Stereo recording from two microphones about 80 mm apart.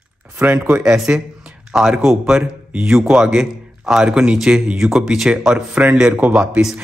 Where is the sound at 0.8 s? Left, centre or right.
Centre.